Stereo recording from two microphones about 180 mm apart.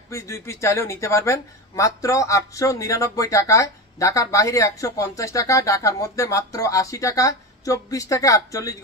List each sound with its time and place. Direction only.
0.1 s speech: 15° left (ahead or behind)